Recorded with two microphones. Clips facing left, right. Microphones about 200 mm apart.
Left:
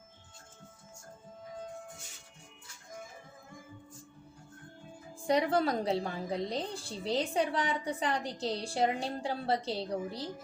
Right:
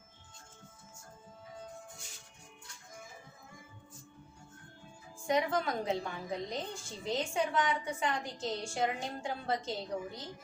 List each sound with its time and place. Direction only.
5.2 s a woman's voice: 35° left (ahead or behind)